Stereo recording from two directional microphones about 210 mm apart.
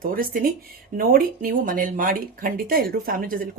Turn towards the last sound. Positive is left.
turn(degrees=-40)  # may be behind; listen again after turning